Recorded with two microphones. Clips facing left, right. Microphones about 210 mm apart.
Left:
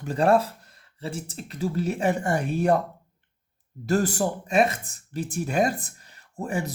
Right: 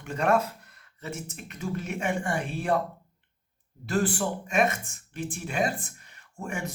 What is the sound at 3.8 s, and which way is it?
Speech, 40° left (ahead or behind).